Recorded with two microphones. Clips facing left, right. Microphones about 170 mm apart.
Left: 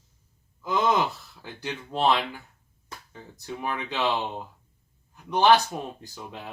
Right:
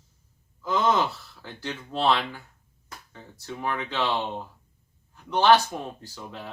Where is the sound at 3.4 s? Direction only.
15° left (ahead or behind).